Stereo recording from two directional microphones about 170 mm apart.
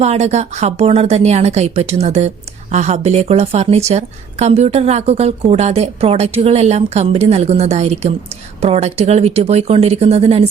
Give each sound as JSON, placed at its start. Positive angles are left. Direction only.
{"t": 0.0, "sound": "a woman's voice", "side_deg": -40}